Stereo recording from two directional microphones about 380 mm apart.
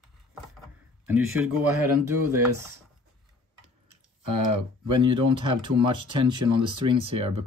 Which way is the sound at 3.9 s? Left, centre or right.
Right.